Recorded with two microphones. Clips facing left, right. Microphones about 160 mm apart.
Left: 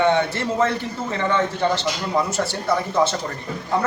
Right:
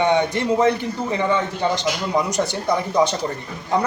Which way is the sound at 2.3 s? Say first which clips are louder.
Right 1 dB; 15° right (ahead or behind).